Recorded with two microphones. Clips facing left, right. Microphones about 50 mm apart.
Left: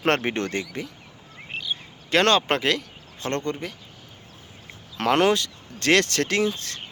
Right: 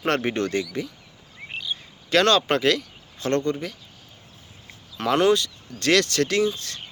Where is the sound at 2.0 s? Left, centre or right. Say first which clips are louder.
Right 1 dB; left.